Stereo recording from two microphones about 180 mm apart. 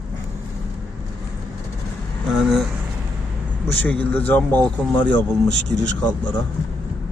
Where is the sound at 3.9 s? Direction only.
10° left (ahead or behind).